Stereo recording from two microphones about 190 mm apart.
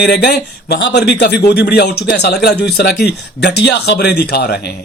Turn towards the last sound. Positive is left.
turn(degrees=60)  # may be behind; listen again after turning